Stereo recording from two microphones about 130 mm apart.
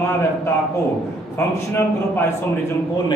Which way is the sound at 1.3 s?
20° left (ahead or behind).